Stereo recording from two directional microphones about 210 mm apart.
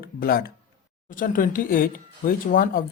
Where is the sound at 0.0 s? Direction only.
45° left (ahead or behind).